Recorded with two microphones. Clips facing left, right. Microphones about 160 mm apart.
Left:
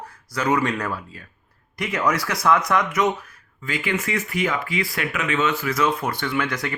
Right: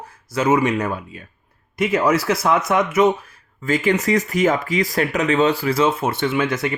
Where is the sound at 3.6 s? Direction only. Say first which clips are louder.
Right 7 dB; 45° right (ahead or behind).